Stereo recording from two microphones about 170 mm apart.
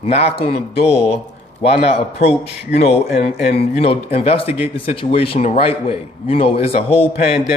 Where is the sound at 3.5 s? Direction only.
35° left (ahead or behind).